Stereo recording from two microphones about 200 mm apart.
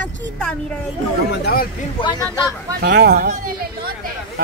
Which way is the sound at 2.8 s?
50° right (ahead or behind).